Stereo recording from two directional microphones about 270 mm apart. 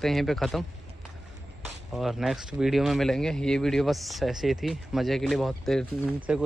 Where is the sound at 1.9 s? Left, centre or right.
Centre.